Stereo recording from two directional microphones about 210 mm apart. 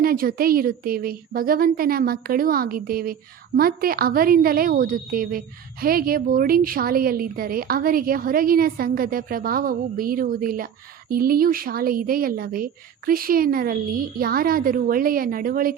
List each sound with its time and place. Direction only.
0.0 s speech: 45° right (ahead or behind)